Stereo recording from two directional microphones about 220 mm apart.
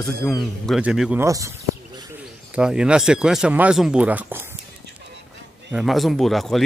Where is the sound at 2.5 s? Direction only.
5° right (ahead or behind).